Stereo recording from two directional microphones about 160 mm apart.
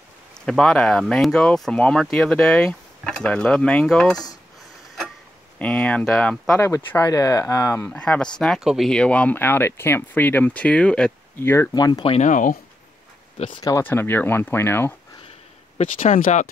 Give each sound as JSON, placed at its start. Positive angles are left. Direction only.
{"t": 0.5, "sound": "speech", "side_deg": 5}
{"t": 5.6, "sound": "speech", "side_deg": 5}
{"t": 6.6, "sound": "speech", "side_deg": 20}
{"t": 7.8, "sound": "speech", "side_deg": 10}
{"t": 11.7, "sound": "speech", "side_deg": 25}
{"t": 12.1, "sound": "speech", "side_deg": 50}
{"t": 13.6, "sound": "speech", "side_deg": 25}
{"t": 16.0, "sound": "speech", "side_deg": 50}